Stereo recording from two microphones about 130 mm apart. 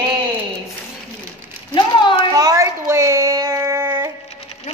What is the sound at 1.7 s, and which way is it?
Speech, 35° left (ahead or behind).